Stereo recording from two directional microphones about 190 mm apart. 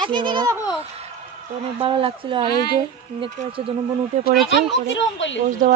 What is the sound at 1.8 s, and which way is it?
Speech, 30° right (ahead or behind).